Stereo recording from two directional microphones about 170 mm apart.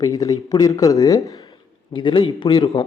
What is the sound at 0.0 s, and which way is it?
A man's voice, 20° left (ahead or behind).